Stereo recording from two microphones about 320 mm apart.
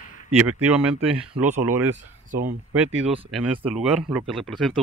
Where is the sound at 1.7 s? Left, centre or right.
Centre.